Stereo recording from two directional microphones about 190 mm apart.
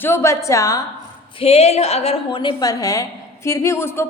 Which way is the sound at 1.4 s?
35° left (ahead or behind).